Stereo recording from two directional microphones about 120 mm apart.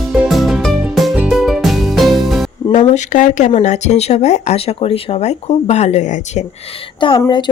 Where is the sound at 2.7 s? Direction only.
85° left.